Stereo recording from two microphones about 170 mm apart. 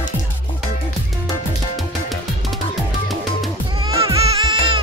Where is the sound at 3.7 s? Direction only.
20° right (ahead or behind).